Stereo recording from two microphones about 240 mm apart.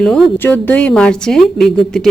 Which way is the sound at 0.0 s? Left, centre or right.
Centre.